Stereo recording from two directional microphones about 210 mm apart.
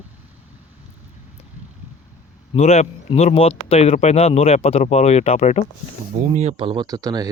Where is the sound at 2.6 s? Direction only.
30° left (ahead or behind).